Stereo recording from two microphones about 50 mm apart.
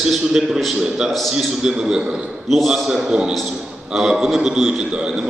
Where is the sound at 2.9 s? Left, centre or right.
Centre.